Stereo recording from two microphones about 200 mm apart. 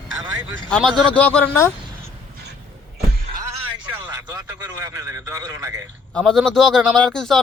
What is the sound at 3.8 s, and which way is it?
A man's voice, 10° right (ahead or behind).